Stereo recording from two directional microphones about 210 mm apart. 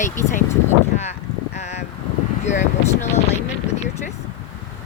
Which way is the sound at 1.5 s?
30° left (ahead or behind).